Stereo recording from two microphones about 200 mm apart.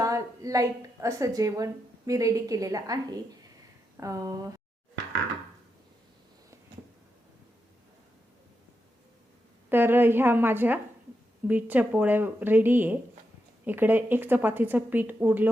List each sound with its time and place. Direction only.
0.0 s a woman's voice: 15° right (ahead or behind)
9.6 s a woman's voice: 10° right (ahead or behind)